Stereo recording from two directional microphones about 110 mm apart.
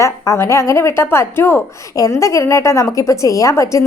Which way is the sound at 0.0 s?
25° left (ahead or behind).